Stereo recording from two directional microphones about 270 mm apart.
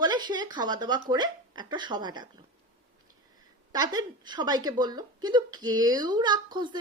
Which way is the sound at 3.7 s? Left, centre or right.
Centre.